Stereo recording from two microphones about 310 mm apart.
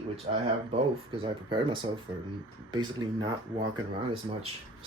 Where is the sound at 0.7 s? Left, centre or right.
Centre.